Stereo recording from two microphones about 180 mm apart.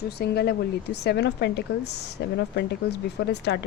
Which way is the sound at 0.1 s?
60° left (ahead or behind).